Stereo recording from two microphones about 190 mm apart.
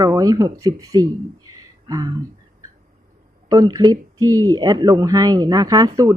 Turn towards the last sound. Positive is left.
turn(degrees=-20)  # may be behind; listen again after turning